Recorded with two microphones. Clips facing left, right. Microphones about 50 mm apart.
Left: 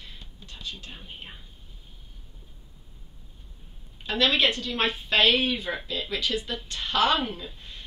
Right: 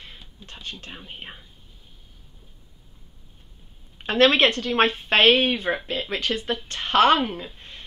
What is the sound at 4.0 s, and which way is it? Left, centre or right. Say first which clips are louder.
Speech: right 6 dB; right.